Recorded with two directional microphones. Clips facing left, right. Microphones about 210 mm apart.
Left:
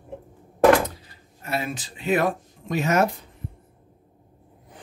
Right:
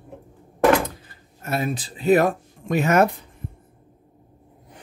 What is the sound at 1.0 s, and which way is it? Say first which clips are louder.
Speech: right 3 dB; 45° right (ahead or behind).